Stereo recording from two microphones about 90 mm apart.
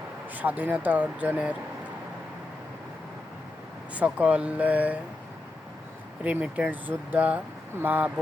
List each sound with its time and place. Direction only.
0.3 s speech: 20° right (ahead or behind)
3.9 s speech: 15° right (ahead or behind)
6.2 s speech: 15° right (ahead or behind)